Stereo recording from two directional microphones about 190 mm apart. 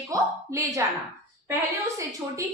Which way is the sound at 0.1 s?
15° right (ahead or behind).